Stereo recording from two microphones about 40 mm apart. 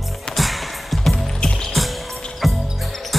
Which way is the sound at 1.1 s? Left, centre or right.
Centre.